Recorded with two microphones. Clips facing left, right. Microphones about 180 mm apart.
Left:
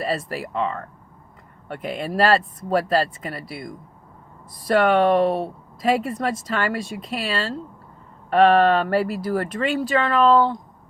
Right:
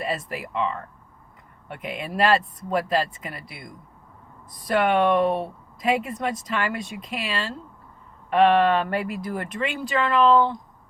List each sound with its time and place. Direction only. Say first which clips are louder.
0.0 s speech: left 3 dB; 35° left (ahead or behind)
1.8 s speech: left 3 dB; 35° left (ahead or behind)
4.7 s a woman's voice: left 3 dB; 40° left (ahead or behind)